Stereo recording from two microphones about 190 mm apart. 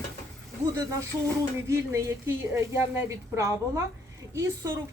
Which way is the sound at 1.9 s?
15° right (ahead or behind).